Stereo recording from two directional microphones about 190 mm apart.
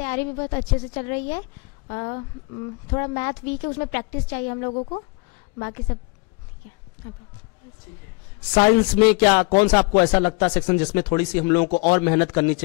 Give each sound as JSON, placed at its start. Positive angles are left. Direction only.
{"t": 0.0, "sound": "speech", "side_deg": 15}
{"t": 3.2, "sound": "speech", "side_deg": 15}
{"t": 4.7, "sound": "speech", "side_deg": 30}
{"t": 5.6, "sound": "speech", "side_deg": 20}
{"t": 8.8, "sound": "speech", "side_deg": 15}